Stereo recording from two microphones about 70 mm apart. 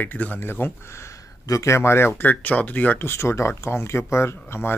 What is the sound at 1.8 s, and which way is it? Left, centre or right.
Speech, left.